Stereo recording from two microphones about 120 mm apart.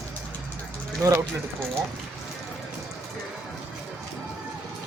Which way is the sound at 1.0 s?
25° right (ahead or behind).